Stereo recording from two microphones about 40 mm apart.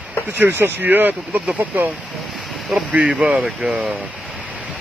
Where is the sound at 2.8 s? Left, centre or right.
Right.